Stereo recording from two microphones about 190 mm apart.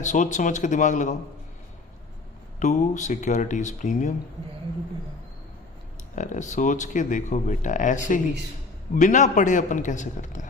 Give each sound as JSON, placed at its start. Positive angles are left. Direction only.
{"t": 0.0, "sound": "speech", "side_deg": 40}
{"t": 2.6, "sound": "speech", "side_deg": 40}
{"t": 6.1, "sound": "speech", "side_deg": 40}